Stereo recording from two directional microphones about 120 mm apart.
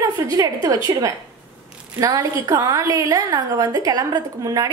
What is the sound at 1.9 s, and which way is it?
A woman's voice, 30° right (ahead or behind).